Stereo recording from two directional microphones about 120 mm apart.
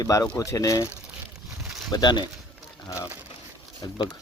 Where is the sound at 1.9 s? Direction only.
35° left (ahead or behind).